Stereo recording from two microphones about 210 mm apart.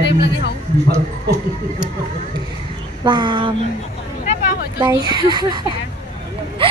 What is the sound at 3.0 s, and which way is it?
Speech, 20° right (ahead or behind).